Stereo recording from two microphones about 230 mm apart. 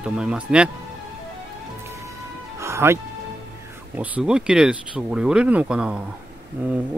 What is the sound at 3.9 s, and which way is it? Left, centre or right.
Speech, centre.